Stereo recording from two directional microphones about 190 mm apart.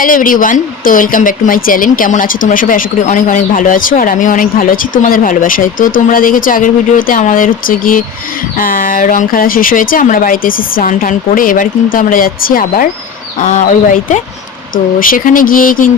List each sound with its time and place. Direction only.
0.0 s a woman's voice: 45° left (ahead or behind)